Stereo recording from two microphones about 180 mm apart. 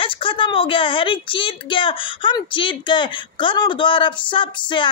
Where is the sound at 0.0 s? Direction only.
30° left (ahead or behind).